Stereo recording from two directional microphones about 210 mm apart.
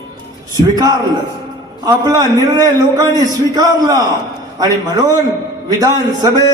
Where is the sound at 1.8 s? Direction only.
20° right (ahead or behind).